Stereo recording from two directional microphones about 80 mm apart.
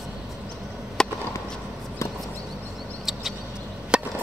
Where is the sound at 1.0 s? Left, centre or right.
Centre.